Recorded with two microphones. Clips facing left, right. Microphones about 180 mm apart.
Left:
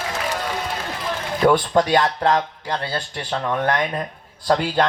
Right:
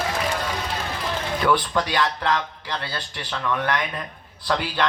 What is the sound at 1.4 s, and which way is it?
Speech, 45° left (ahead or behind).